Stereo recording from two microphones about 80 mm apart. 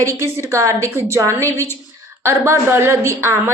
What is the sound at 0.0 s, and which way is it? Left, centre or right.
A woman's voice, right.